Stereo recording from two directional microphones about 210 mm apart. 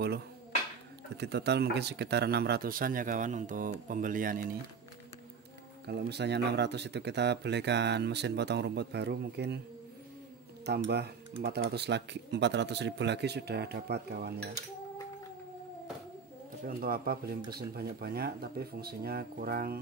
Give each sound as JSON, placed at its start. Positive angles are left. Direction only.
{"t": 1.1, "sound": "speech", "side_deg": -50}
{"t": 5.9, "sound": "speech", "side_deg": -50}
{"t": 10.6, "sound": "speech", "side_deg": -50}
{"t": 16.6, "sound": "speech", "side_deg": -45}